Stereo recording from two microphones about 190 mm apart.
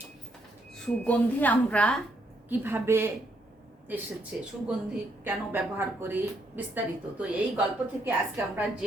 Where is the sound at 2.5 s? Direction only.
10° right (ahead or behind).